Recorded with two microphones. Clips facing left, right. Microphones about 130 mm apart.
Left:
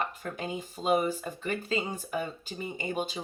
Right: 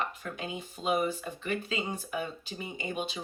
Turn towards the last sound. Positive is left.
turn(degrees=40)  # may be behind; listen again after turning